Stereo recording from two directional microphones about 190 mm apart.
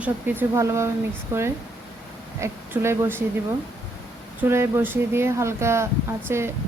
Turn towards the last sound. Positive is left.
turn(degrees=-15)  # may be behind; listen again after turning